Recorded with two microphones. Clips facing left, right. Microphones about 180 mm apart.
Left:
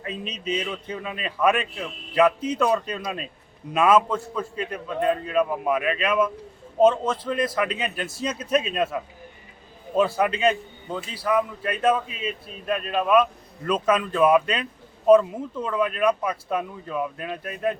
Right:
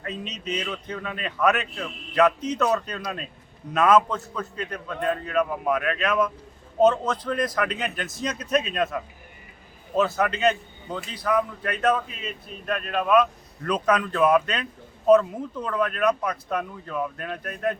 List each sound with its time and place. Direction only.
0.0 s a man's voice: 10° left (ahead or behind)
10.2 s speech: 10° left (ahead or behind)